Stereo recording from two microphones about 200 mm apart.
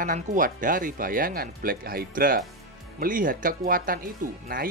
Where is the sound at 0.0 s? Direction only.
40° right (ahead or behind).